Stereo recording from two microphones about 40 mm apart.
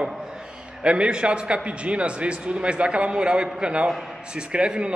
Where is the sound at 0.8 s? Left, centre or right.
Right.